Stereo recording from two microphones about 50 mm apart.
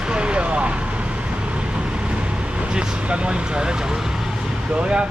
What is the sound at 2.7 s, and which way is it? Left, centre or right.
Speech, centre.